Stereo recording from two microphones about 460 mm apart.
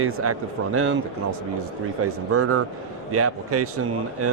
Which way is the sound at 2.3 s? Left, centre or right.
Right.